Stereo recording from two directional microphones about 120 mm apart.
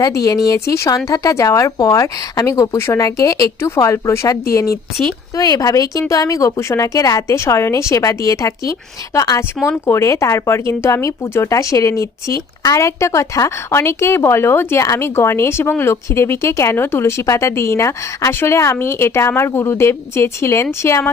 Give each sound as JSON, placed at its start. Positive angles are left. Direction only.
{"t": 0.0, "sound": "speech", "side_deg": 30}